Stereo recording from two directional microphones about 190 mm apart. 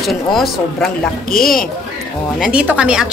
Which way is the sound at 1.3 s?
50° left (ahead or behind).